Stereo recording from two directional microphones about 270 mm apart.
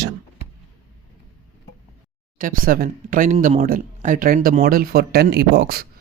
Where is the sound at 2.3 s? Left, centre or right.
Right.